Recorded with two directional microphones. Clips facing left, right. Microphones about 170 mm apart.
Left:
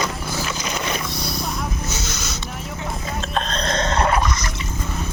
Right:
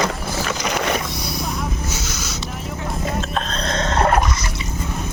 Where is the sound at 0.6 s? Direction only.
70° right (ahead or behind).